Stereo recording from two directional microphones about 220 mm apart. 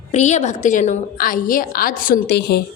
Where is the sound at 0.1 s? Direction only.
30° left (ahead or behind).